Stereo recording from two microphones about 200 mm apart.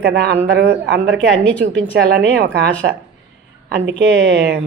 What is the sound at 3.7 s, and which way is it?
Speech, 60° right (ahead or behind).